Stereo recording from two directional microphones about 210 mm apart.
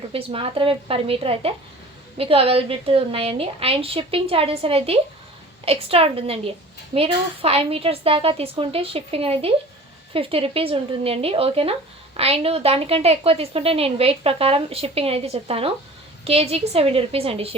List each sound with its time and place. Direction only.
0.1 s a woman's voice: 25° right (ahead or behind)